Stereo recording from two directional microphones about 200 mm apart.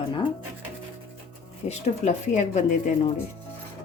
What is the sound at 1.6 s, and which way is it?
A woman's voice, 35° left (ahead or behind).